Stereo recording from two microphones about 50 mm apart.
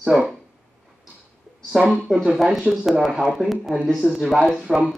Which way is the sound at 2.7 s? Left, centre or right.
Right.